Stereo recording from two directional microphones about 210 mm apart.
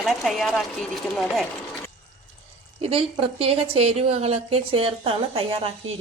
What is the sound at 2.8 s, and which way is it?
A woman's voice, 25° right (ahead or behind).